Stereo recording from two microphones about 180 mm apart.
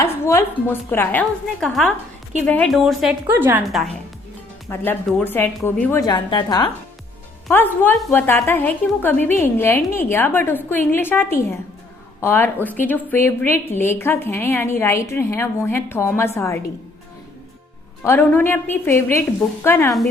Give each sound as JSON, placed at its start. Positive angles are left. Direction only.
{"t": 0.0, "sound": "a woman's voice", "side_deg": 15}
{"t": 3.2, "sound": "a woman's voice", "side_deg": -10}
{"t": 4.7, "sound": "a woman's voice", "side_deg": 10}
{"t": 6.0, "sound": "a woman's voice", "side_deg": 20}
{"t": 7.5, "sound": "a woman's voice", "side_deg": 10}
{"t": 18.0, "sound": "a woman's voice", "side_deg": 10}